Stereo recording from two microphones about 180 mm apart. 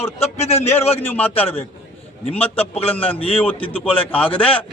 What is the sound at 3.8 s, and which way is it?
Speech, 10° left (ahead or behind).